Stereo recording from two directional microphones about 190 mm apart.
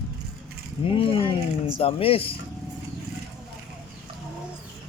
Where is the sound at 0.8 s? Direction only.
30° left (ahead or behind).